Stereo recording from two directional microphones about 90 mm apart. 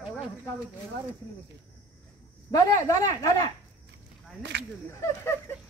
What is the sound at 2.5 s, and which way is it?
Speech, 40° left (ahead or behind).